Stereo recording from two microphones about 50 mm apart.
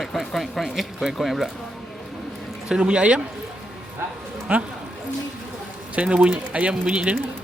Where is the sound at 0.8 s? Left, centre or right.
Centre.